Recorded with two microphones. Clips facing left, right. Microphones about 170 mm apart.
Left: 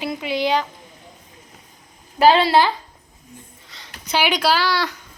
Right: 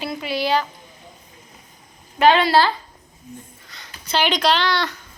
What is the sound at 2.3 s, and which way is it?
Speech, 30° left (ahead or behind).